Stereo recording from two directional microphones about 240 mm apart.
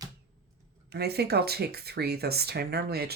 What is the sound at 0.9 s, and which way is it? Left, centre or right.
Speech, right.